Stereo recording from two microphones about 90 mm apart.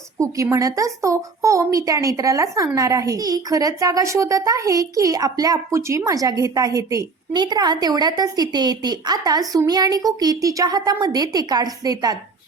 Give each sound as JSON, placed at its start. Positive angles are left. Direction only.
{"t": 0.4, "sound": "a woman's voice", "side_deg": -35}